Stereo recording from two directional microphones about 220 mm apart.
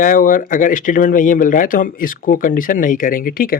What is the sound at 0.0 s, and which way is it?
Speech, 40° left (ahead or behind).